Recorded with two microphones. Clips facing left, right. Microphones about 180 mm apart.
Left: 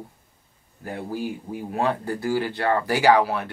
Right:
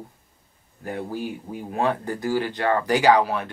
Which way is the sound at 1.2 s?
20° right (ahead or behind).